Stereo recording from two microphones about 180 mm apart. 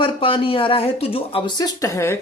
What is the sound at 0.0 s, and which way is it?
Speech, 30° left (ahead or behind).